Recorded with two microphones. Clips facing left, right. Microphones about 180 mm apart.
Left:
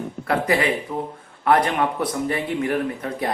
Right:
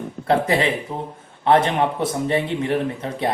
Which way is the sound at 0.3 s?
25° right (ahead or behind).